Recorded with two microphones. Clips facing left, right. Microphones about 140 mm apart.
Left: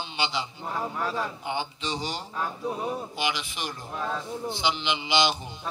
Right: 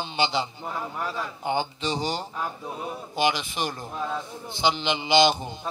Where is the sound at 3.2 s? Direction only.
40° right (ahead or behind).